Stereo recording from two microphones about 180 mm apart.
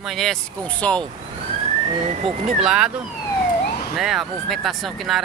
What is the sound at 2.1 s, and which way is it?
Speech, 45° right (ahead or behind).